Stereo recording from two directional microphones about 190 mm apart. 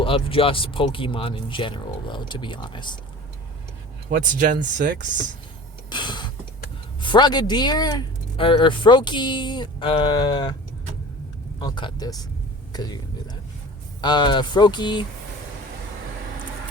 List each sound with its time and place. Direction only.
0.0 s speech: 30° left (ahead or behind)
4.1 s speech: 45° right (ahead or behind)
5.9 s mechanisms: 25° left (ahead or behind)
7.0 s speech: 25° left (ahead or behind)
11.6 s speech: 20° left (ahead or behind)
14.0 s speech: 25° left (ahead or behind)